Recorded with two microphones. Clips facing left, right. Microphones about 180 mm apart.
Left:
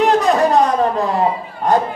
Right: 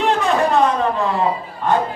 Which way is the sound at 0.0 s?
40° left (ahead or behind).